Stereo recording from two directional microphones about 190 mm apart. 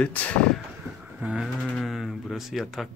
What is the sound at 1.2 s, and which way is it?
Speech, centre (ahead or behind).